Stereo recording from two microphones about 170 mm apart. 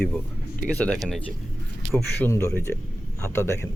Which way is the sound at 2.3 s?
15° left (ahead or behind).